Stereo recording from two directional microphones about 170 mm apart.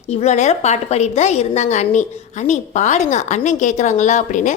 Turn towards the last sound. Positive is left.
turn(degrees=45)  # may be behind; listen again after turning